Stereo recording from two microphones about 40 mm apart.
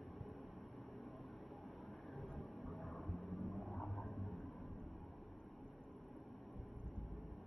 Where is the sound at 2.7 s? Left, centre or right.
Centre.